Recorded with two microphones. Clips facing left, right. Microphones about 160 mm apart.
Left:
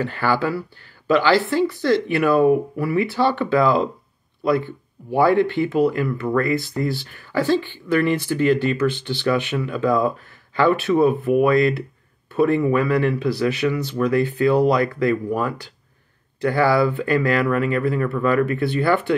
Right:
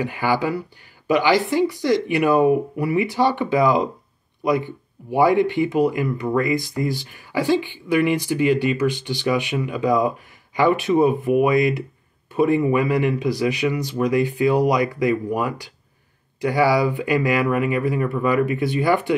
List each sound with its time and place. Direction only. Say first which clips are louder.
0.0 s speech: even; 15° right (ahead or behind)